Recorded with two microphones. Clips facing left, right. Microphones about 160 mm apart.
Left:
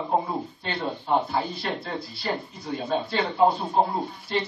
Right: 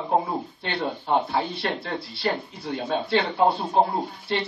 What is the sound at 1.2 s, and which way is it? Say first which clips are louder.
Speech: right 2 dB; 65° right (ahead or behind).